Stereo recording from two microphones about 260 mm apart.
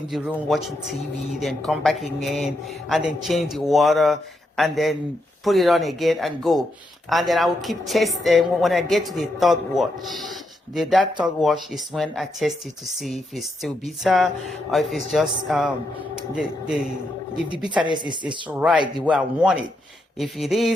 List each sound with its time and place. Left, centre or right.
0.1 s a woman's voice: centre
17.7 s speech: centre
18.5 s a woman's voice: centre